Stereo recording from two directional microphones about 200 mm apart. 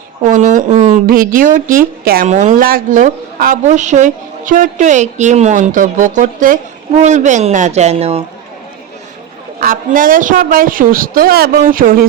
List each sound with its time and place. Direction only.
0.2 s a woman's voice: 40° right (ahead or behind)
9.6 s a woman's voice: 45° right (ahead or behind)